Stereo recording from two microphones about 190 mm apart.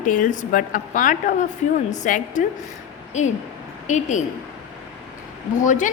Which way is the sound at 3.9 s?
40° left (ahead or behind).